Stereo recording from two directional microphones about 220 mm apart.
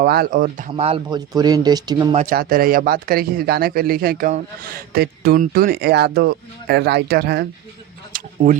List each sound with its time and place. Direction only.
0.0 s speech: 45° right (ahead or behind); by 2.1 s 20° right (ahead or behind)
2.1 s speech: 40° right (ahead or behind)
8.1 s a sound: 40° right (ahead or behind)